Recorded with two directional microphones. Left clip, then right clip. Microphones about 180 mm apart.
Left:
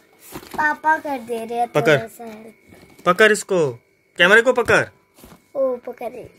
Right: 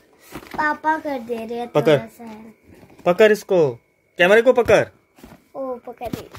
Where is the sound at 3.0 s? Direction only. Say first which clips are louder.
Even; 10° right (ahead or behind).